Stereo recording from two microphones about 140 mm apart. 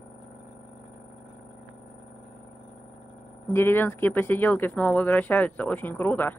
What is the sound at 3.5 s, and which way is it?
Speech, 15° left (ahead or behind).